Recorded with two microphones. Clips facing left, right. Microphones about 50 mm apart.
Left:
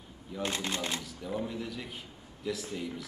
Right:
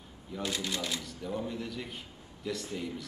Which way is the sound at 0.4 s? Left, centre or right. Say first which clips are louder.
Left 1 dB; left.